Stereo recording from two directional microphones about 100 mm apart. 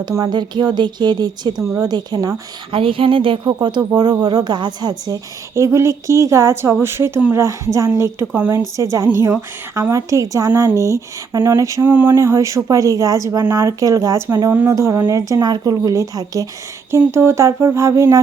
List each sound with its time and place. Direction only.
0.3 s a woman's voice: 45° right (ahead or behind)
2.7 s speech: 60° right (ahead or behind); by 7.4 s 20° right (ahead or behind)
7.4 s speech: 30° right (ahead or behind)
7.9 s music: 25° right (ahead or behind)
8.7 s speech: 30° right (ahead or behind)
11.9 s music: 20° right (ahead or behind)
12.1 s speech: 30° right (ahead or behind)
14.5 s music: 20° right (ahead or behind)
14.8 s speech: 30° right (ahead or behind)
17.0 s music: 25° right (ahead or behind)